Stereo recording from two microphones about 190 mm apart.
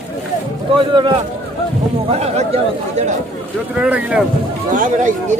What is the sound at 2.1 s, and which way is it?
Speech, 35° right (ahead or behind).